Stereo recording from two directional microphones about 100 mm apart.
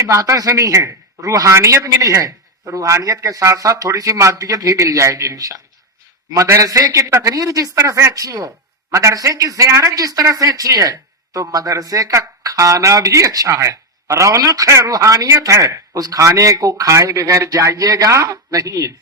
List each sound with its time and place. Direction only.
0.0 s a man's voice: 35° right (ahead or behind)